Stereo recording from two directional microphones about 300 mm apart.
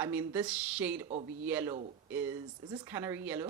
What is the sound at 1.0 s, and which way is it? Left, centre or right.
Speech, right.